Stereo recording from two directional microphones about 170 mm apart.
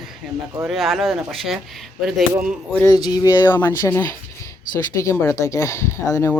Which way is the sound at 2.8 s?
20° left (ahead or behind).